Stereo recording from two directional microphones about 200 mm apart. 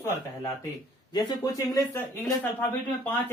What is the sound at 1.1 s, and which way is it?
Speech, 20° left (ahead or behind).